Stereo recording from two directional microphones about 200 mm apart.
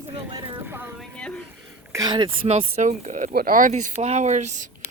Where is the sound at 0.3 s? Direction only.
15° right (ahead or behind).